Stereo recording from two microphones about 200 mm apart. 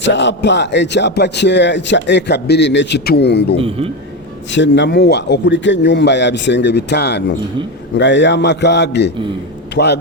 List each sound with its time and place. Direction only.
0.0 s a man's voice: 60° left (ahead or behind)
3.6 s a man's voice: 30° right (ahead or behind)
4.5 s a man's voice: 60° left (ahead or behind)